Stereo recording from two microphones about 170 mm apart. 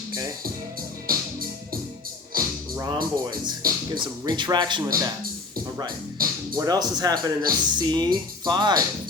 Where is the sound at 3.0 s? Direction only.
20° right (ahead or behind).